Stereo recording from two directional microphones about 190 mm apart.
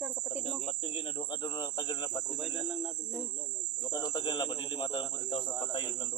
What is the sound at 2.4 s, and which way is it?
Speech, centre (ahead or behind).